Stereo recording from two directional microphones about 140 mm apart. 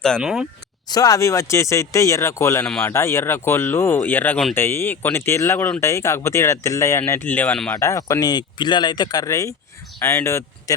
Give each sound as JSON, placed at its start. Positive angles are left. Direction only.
{"t": 0.2, "sound": "speech", "side_deg": -5}
{"t": 0.9, "sound": "speech", "side_deg": 25}
{"t": 7.8, "sound": "speech", "side_deg": 20}